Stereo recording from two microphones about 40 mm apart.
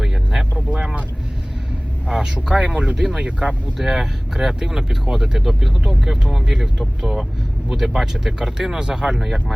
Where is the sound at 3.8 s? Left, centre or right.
Centre.